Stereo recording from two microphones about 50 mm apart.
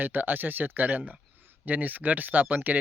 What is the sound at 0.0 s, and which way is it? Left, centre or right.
Speech, right.